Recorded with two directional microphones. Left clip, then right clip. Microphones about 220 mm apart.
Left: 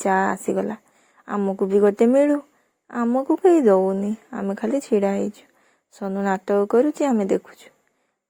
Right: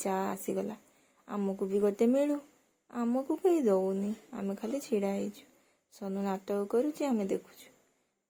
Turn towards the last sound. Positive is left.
turn(degrees=25)  # may be behind; listen again after turning